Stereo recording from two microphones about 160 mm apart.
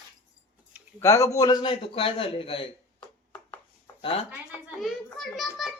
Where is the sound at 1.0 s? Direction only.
20° left (ahead or behind); by 2.7 s 35° left (ahead or behind).